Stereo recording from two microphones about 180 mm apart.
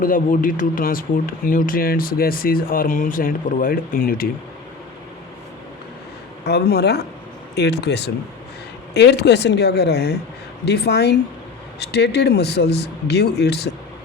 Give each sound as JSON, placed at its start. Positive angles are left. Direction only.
{"t": 0.0, "sound": "speech", "side_deg": 50}
{"t": 6.4, "sound": "speech", "side_deg": 65}